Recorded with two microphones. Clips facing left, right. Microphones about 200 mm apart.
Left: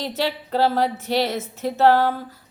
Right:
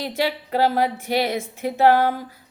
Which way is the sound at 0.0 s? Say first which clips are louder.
Right 1 dB; 10° right (ahead or behind).